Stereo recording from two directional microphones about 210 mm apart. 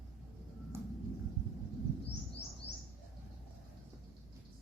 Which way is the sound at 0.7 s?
10° right (ahead or behind).